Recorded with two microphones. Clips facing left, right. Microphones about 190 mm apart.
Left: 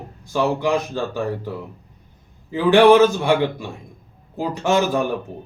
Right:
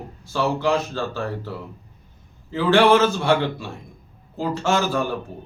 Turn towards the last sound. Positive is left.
turn(degrees=20)  # may be behind; listen again after turning